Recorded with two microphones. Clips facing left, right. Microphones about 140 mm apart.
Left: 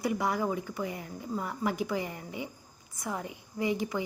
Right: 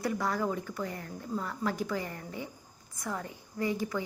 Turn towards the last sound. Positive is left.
turn(degrees=15)  # may be behind; listen again after turning